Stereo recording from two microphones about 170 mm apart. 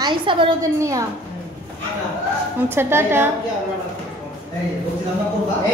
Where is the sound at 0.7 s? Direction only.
20° right (ahead or behind).